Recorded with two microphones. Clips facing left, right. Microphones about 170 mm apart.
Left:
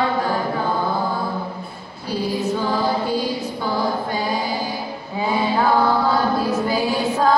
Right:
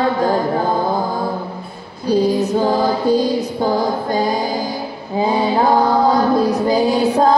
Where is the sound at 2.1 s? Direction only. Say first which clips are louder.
Right 7 dB; 40° right (ahead or behind).